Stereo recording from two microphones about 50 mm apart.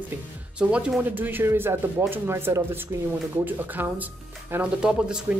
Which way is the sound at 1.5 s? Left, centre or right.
Right.